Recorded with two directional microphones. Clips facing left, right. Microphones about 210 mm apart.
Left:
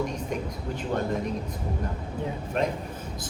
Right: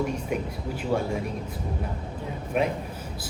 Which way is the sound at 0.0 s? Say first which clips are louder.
Right 2 dB; 10° right (ahead or behind).